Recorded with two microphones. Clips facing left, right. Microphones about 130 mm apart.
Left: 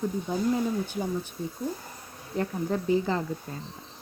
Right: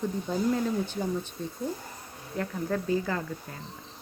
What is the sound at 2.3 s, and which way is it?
Speech, 20° left (ahead or behind).